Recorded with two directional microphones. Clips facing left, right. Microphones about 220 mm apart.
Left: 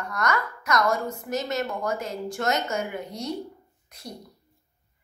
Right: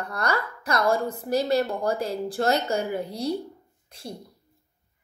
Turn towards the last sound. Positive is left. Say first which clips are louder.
# right 3 dB
turn(degrees=-30)  # may be behind; listen again after turning